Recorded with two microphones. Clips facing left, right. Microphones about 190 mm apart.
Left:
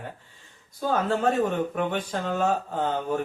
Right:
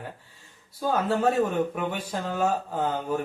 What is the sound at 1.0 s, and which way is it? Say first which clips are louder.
Speech: right 1 dB; 5° right (ahead or behind).